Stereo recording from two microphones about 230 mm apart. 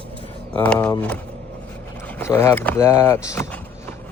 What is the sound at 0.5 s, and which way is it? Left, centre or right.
Speech, centre.